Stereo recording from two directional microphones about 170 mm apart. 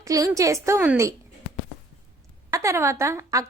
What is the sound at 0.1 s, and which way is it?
Speech, 20° right (ahead or behind).